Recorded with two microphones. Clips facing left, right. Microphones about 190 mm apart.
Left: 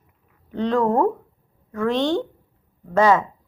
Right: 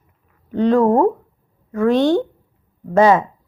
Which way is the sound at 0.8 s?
15° right (ahead or behind).